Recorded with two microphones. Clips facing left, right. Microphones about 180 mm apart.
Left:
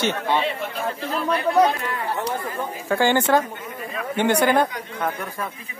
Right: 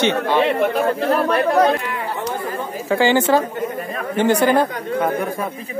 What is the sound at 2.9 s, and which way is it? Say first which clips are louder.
Speech: right 3 dB; 10° right (ahead or behind).